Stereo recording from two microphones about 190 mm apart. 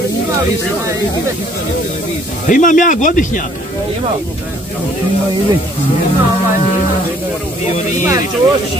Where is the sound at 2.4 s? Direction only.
45° left (ahead or behind).